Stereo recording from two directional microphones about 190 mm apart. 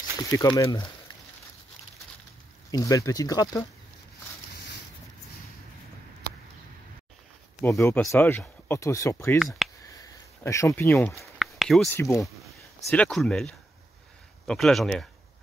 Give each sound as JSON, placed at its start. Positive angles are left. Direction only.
{"t": 0.5, "sound": "speech", "side_deg": 15}
{"t": 2.7, "sound": "speech", "side_deg": 20}
{"t": 7.6, "sound": "speech", "side_deg": 10}
{"t": 9.6, "sound": "a sound", "side_deg": 0}
{"t": 10.4, "sound": "speech", "side_deg": 15}
{"t": 11.3, "sound": "a sound", "side_deg": 0}
{"t": 11.9, "sound": "speech", "side_deg": 15}
{"t": 12.4, "sound": "speech", "side_deg": 5}